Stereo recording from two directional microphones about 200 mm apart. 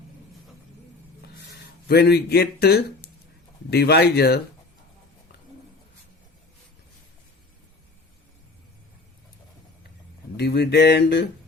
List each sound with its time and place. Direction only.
1.9 s a man's voice: 55° left (ahead or behind)
10.3 s speech: 55° left (ahead or behind)